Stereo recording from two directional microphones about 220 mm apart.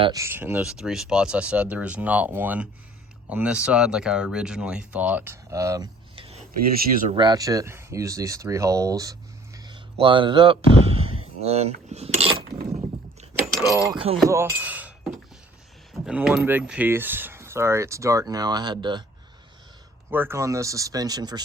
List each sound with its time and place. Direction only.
0.0 s speech: 15° right (ahead or behind)
6.6 s speech: 40° right (ahead or behind)
7.1 s speech: 20° right (ahead or behind)
14.3 s speech: 15° right (ahead or behind)
20.1 s speech: 10° right (ahead or behind)